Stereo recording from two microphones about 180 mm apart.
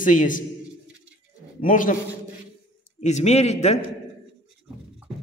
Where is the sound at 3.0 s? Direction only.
40° left (ahead or behind).